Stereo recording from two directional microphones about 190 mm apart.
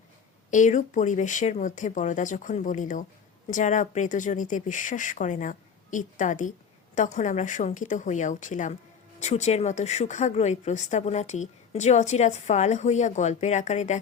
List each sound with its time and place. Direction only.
0.5 s a woman's voice: 40° left (ahead or behind)